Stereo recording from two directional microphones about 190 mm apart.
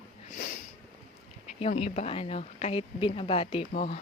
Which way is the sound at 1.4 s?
35° left (ahead or behind).